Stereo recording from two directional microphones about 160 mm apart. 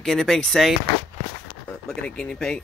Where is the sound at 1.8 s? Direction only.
5° left (ahead or behind).